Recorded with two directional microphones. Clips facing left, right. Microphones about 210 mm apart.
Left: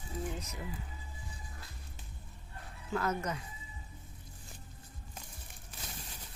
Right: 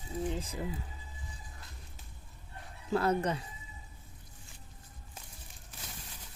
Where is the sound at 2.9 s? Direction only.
30° right (ahead or behind).